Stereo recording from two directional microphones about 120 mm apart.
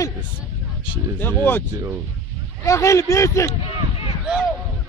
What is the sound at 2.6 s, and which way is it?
Speech, 25° left (ahead or behind).